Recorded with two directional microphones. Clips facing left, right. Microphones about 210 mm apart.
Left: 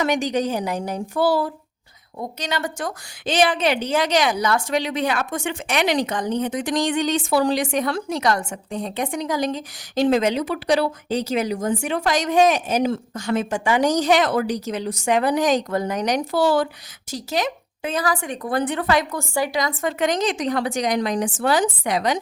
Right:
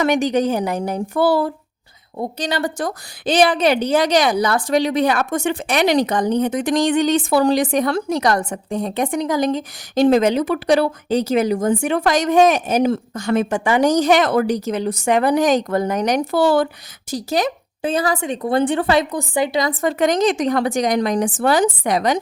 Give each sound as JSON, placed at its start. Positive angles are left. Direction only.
{"t": 0.0, "sound": "a woman's voice", "side_deg": -55}
{"t": 2.1, "sound": "a woman's voice", "side_deg": -35}
{"t": 6.3, "sound": "a woman's voice", "side_deg": -60}
{"t": 17.1, "sound": "speech", "side_deg": -35}
{"t": 20.1, "sound": "a woman's voice", "side_deg": -55}